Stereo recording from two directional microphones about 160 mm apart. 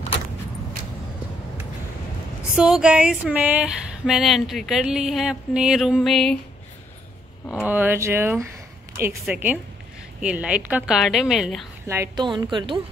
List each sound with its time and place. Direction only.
2.5 s speech: 5° right (ahead or behind)
7.6 s a sound: 10° right (ahead or behind)
10.9 s speech: centre (ahead or behind)
11.8 s a woman's voice: 15° right (ahead or behind)
12.2 s a woman's voice: 30° right (ahead or behind)